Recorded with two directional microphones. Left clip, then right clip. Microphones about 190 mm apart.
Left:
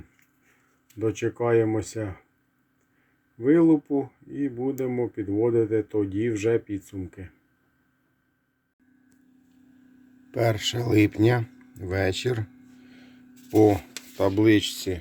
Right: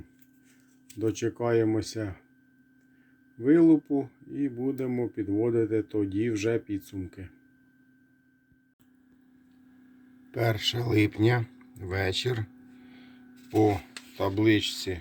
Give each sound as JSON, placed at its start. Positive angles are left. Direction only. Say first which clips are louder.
{"t": 0.9, "sound": "speech", "louder": "left 3 dB", "side_deg": 0}
{"t": 3.3, "sound": "speech", "louder": "left 1 dB", "side_deg": 0}
{"t": 10.3, "sound": "speech", "louder": "left 3 dB", "side_deg": 20}
{"t": 13.5, "sound": "speech", "louder": "left 5 dB", "side_deg": 25}